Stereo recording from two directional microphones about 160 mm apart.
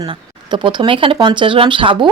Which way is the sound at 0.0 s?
30° right (ahead or behind).